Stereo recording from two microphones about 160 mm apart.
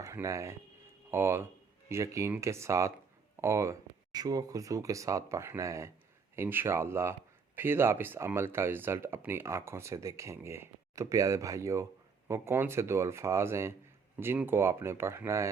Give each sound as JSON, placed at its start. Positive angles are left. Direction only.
{"t": 0.0, "sound": "speech", "side_deg": -20}